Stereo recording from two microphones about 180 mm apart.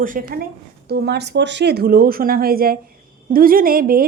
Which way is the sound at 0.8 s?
60° right (ahead or behind).